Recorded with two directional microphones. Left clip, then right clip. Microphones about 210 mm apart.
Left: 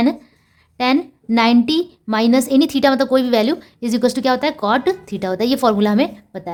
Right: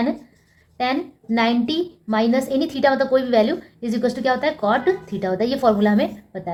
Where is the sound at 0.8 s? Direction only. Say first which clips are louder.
Left 5 dB; 50° left (ahead or behind).